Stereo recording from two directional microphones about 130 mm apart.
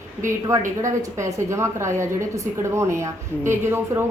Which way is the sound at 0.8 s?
25° right (ahead or behind).